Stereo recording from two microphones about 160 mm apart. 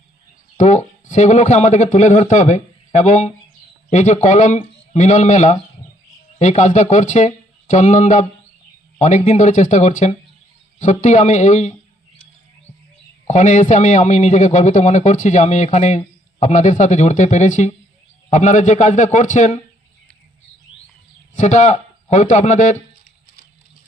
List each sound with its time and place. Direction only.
0.5 s a man's voice: 45° left (ahead or behind)
13.2 s a man's voice: 50° left (ahead or behind)
21.3 s a man's voice: 50° left (ahead or behind)